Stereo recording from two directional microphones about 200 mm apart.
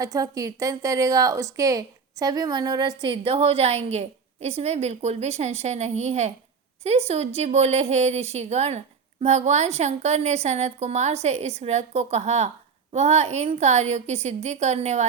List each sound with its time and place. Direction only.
0.0 s a woman's voice: 15° right (ahead or behind); by 15.0 s 35° right (ahead or behind)